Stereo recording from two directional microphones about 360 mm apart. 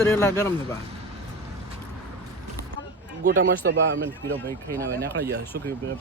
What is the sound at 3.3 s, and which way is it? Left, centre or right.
Speech, right.